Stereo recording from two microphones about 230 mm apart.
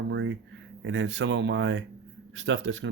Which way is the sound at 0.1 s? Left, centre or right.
Right.